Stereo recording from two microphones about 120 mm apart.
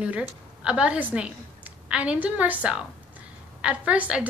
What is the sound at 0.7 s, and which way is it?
A woman's voice, 10° right (ahead or behind).